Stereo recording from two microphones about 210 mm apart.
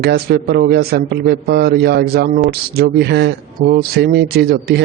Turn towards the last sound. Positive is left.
turn(degrees=-50)  # may be behind; listen again after turning